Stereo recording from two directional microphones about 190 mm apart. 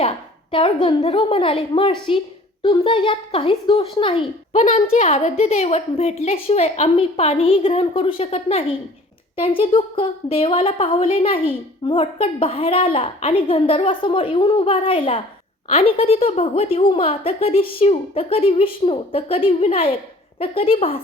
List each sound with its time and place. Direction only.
0.5 s a woman's voice: 30° left (ahead or behind)